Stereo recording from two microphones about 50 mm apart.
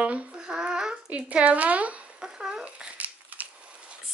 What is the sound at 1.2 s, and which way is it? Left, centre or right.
Speech, right.